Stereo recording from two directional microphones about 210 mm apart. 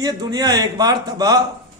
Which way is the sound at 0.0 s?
20° right (ahead or behind).